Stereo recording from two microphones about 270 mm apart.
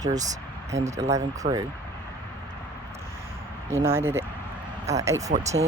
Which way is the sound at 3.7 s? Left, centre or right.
Centre.